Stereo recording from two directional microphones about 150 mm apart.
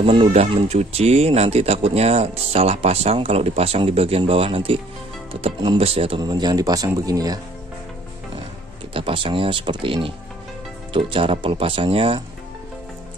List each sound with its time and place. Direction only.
0.0 s speech: 40° right (ahead or behind)
8.9 s speech: 35° right (ahead or behind)